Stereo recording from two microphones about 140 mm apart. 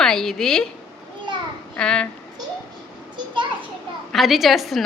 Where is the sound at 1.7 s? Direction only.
5° left (ahead or behind).